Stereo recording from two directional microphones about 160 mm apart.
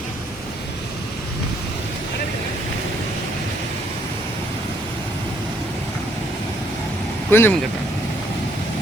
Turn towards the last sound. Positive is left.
turn(degrees=15)  # may be behind; listen again after turning